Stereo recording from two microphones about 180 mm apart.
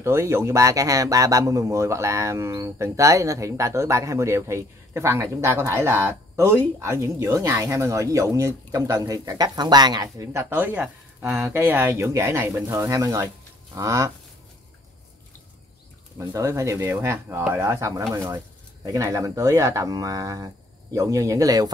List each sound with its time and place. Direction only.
0.0 s speech: 15° right (ahead or behind)
16.3 s speech: 15° right (ahead or behind)